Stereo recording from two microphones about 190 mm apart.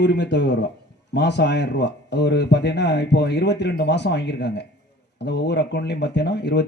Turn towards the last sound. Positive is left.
turn(degrees=65)  # may be behind; listen again after turning